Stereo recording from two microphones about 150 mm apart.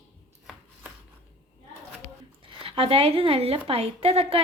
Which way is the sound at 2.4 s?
35° right (ahead or behind).